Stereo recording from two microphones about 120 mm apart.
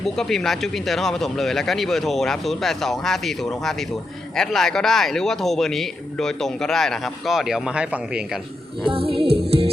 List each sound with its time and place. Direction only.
0.0 s speech: 5° left (ahead or behind)
8.9 s music: 50° right (ahead or behind)